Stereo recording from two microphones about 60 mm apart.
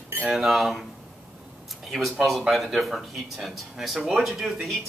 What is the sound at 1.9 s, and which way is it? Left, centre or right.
Speech, centre.